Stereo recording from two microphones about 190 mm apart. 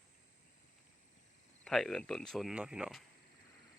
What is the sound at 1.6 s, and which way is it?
Speech, 5° left (ahead or behind).